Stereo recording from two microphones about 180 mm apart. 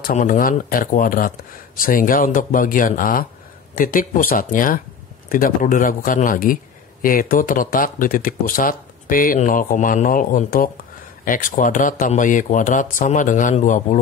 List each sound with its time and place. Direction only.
0.0 s a man's voice: 45° left (ahead or behind)